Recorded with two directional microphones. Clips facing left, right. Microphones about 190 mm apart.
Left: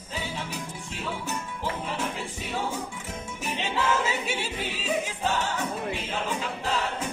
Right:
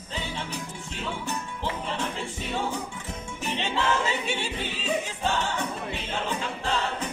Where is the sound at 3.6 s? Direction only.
5° left (ahead or behind).